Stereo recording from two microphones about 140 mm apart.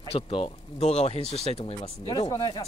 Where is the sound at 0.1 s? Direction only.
40° left (ahead or behind).